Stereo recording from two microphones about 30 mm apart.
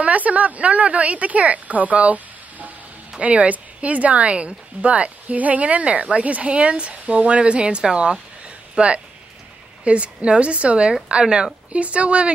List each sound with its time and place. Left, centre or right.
0.0 s speech: right
3.2 s a woman's voice: right
7.8 s speech: right
8.7 s a woman's voice: right